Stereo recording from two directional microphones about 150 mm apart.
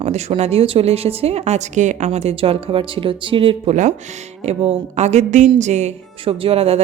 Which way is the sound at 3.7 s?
50° right (ahead or behind).